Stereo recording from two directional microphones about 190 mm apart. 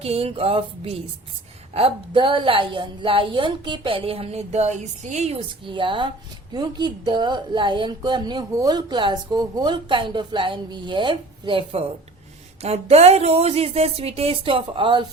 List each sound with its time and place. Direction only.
0.0 s speech: 30° right (ahead or behind)